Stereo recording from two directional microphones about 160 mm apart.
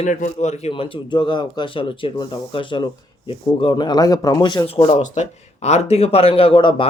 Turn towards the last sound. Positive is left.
turn(degrees=30)  # may be behind; listen again after turning